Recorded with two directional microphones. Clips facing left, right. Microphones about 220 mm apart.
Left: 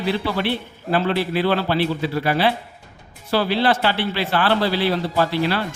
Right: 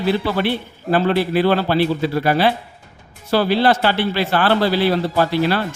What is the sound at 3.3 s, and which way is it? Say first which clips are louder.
A man's voice: right 3 dB; 45° right (ahead or behind).